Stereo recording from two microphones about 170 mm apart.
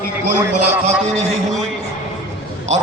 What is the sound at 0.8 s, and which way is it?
Speech, 40° right (ahead or behind).